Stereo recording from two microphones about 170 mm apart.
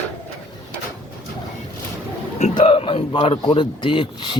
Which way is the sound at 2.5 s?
35° left (ahead or behind).